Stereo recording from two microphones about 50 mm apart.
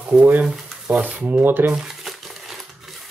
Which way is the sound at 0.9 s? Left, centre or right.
Right.